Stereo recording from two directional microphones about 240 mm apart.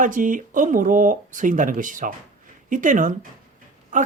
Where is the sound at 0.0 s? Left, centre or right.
Right.